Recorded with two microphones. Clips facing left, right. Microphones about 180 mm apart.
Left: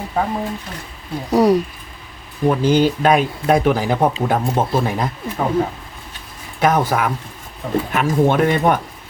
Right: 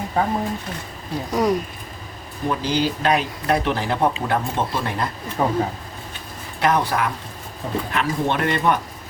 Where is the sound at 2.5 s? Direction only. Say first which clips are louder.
Left 7 dB; 50° left (ahead or behind).